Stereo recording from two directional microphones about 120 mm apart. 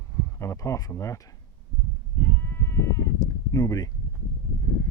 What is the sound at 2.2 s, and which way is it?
Sheep, 20° left (ahead or behind).